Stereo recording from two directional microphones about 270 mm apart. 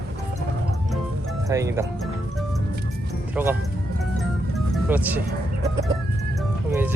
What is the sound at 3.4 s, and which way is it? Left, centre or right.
Speech, centre.